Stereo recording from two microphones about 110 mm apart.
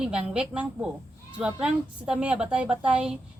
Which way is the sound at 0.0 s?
10° right (ahead or behind).